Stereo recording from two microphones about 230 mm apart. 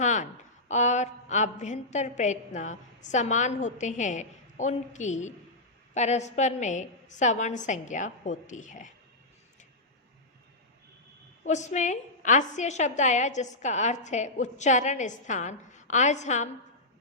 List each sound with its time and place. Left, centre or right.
0.0 s a sound: left
0.7 s a woman's voice: left
11.4 s a woman's voice: left